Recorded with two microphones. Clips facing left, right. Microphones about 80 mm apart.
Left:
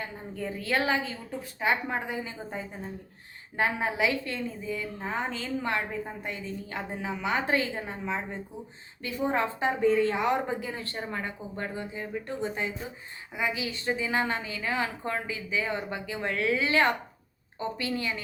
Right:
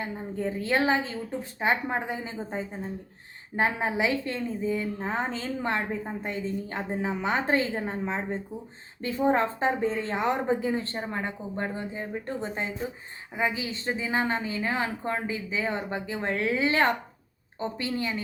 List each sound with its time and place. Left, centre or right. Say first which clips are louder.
0.0 s a woman's voice: right 5 dB; right